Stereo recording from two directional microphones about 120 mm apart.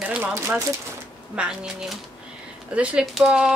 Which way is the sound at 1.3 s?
10° right (ahead or behind).